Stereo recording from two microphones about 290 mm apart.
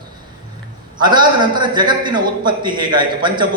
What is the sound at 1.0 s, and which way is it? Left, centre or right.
A man's voice, centre.